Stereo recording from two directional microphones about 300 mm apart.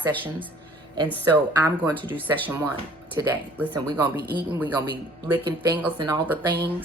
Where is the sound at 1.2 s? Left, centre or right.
Centre.